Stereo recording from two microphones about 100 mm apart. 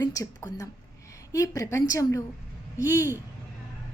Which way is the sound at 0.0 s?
35° left (ahead or behind).